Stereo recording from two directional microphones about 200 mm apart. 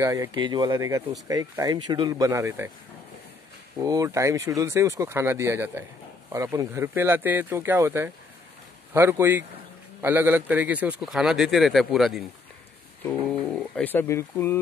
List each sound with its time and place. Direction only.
0.0 s speech: 15° right (ahead or behind)
3.8 s speech: 15° right (ahead or behind); by 14.6 s 15° left (ahead or behind)